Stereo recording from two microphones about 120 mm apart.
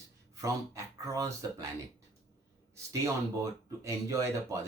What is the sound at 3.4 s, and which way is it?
Speech, 25° right (ahead or behind).